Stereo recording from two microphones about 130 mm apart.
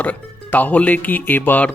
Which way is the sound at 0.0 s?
10° left (ahead or behind).